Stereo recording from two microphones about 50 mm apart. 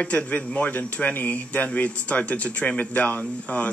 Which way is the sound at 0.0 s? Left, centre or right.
Left.